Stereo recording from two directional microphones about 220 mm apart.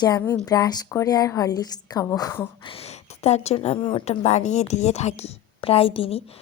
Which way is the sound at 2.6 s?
25° left (ahead or behind).